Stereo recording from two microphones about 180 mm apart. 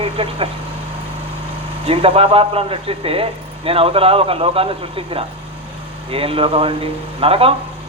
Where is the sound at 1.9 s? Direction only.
30° right (ahead or behind).